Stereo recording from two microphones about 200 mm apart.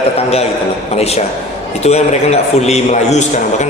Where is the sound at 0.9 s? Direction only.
30° left (ahead or behind).